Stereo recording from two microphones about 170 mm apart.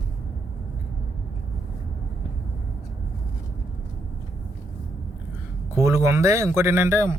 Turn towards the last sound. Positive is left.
turn(degrees=-15)  # may be behind; listen again after turning